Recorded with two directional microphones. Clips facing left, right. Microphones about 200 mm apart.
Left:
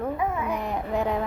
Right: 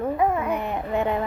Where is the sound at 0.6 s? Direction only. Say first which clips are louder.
Right 2 dB; centre (ahead or behind).